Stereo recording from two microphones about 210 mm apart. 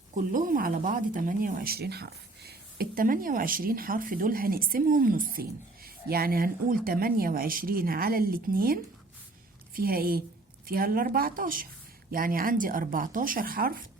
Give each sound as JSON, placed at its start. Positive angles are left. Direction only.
{"t": 0.2, "sound": "speech", "side_deg": -40}